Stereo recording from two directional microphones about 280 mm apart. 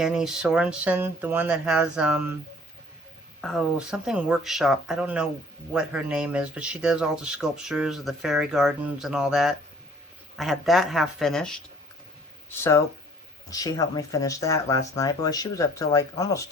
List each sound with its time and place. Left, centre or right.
0.0 s speech: centre
3.4 s speech: centre